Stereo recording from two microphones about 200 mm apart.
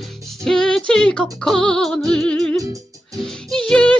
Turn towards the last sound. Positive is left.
turn(degrees=5)  # may be behind; listen again after turning